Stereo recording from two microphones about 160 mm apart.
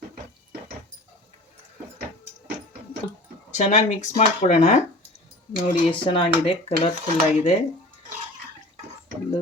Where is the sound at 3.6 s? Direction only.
50° left (ahead or behind).